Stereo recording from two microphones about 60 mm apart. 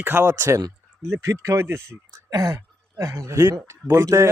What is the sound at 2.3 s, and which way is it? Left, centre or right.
Speech, right.